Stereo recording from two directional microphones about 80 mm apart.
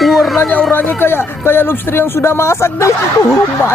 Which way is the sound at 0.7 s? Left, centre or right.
Left.